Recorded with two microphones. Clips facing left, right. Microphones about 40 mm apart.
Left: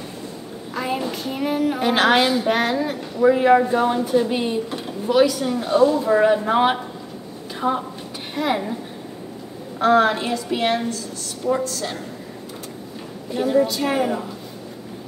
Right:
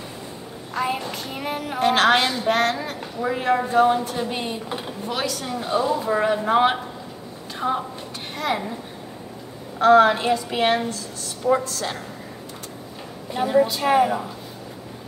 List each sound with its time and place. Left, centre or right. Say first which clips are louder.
0.7 s child singing: left 1 dB; centre
4.6 s drawer open or close: left 1 dB; centre
5.2 s child singing: left 8 dB; centre
7.5 s a woman's voice: left 2 dB; centre
8.4 s child singing: left 3 dB; centre
9.8 s child singing: right 2 dB; centre
13.3 s a woman's voice: even; centre